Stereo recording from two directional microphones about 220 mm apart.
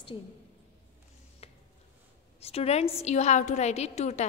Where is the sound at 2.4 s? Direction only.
30° left (ahead or behind).